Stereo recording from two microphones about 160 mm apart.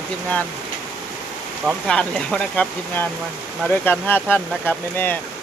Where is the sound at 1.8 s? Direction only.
5° left (ahead or behind).